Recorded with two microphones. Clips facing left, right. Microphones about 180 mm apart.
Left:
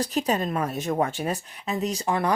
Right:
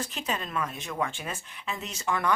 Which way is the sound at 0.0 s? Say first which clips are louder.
Left 9 dB; 40° left (ahead or behind).